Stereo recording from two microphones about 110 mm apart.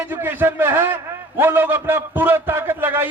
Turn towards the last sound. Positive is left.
turn(degrees=-20)  # may be behind; listen again after turning